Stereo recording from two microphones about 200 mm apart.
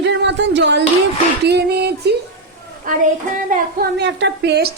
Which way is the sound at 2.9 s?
45° right (ahead or behind).